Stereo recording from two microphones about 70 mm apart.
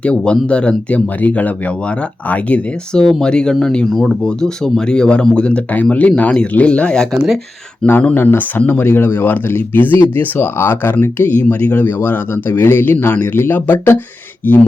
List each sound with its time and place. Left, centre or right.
0.0 s speech: centre
2.9 s speech: centre
7.9 s speech: left